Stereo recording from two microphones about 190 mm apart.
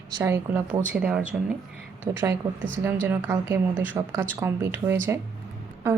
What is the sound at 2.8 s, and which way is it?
Speech, 10° right (ahead or behind).